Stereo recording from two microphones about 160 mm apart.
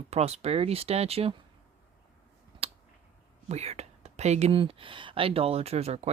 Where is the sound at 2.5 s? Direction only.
30° right (ahead or behind).